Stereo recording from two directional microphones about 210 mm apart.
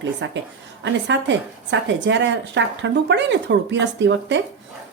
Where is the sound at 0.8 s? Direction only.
60° right (ahead or behind).